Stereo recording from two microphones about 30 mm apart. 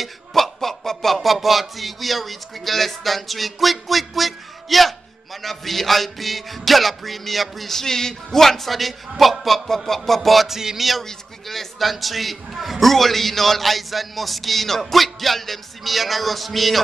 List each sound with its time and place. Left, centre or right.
0.3 s speech: centre
7.7 s speech: centre
10.5 s speech: centre
10.8 s speech: centre
12.8 s speech: centre